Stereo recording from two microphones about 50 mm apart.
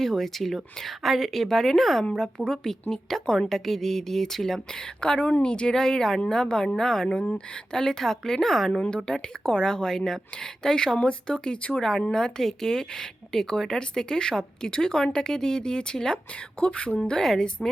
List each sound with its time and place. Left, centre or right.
0.0 s speech: centre
9.0 s speech: centre
17.0 s speech: centre